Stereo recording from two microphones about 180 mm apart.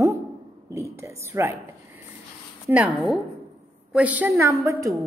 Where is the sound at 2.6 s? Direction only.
10° right (ahead or behind).